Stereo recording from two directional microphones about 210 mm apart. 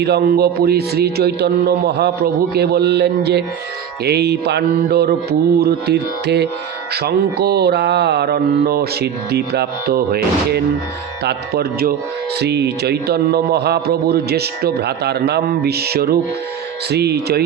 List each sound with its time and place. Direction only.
0.0 s a man's voice: 50° right (ahead or behind)